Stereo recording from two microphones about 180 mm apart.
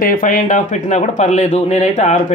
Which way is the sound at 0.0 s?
50° left (ahead or behind).